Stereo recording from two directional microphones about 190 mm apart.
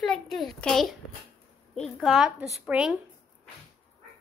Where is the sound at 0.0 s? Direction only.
Centre (ahead or behind).